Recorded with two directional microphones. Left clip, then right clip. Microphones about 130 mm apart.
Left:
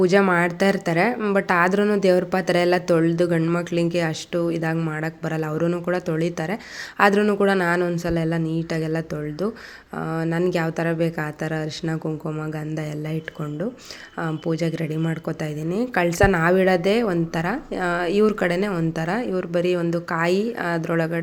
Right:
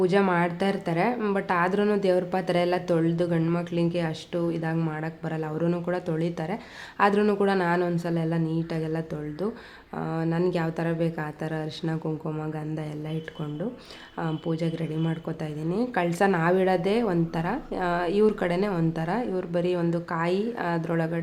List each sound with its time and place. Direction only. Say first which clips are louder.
0.0 s a woman's voice: left 5 dB; 25° left (ahead or behind)
7.2 s speech: left 3 dB; 10° left (ahead or behind)
7.4 s a woman's voice: left 4 dB; 25° left (ahead or behind)
7.8 s speech: left 3 dB; 10° left (ahead or behind)
8.0 s a woman's voice: left 5 dB; 20° left (ahead or behind)
14.2 s a woman's voice: left 5 dB; 20° left (ahead or behind)